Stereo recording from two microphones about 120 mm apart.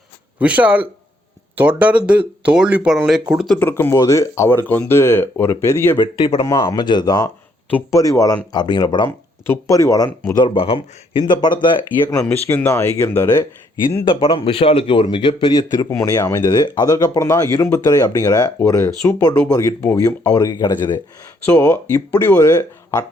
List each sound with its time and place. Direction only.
0.3 s speech: 10° right (ahead or behind)
3.6 s speech: 20° left (ahead or behind)
6.0 s speech: 45° left (ahead or behind)
6.4 s speech: 30° left (ahead or behind)
9.0 s speech: 25° left (ahead or behind)
10.3 s speech: 45° left (ahead or behind)
12.0 s speech: 15° left (ahead or behind)
14.0 s speech: 45° left (ahead or behind)
15.1 s speech: 40° left (ahead or behind)
16.4 s speech: 40° left (ahead or behind)
17.2 s speech: 20° left (ahead or behind)
20.2 s speech: 30° left (ahead or behind)
21.4 s speech: 20° left (ahead or behind)